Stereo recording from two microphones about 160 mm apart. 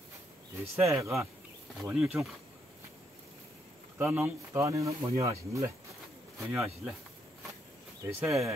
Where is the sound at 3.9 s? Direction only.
10° right (ahead or behind).